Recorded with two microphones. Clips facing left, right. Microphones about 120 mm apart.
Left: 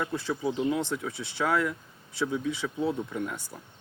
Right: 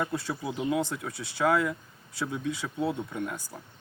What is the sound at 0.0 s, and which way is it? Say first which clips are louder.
Speech: left 2 dB; 5° right (ahead or behind).